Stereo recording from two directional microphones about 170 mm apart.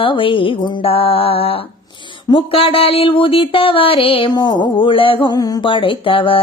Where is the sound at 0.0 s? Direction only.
30° left (ahead or behind).